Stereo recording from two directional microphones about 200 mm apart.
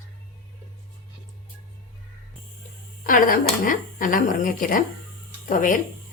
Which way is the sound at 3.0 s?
45° left (ahead or behind).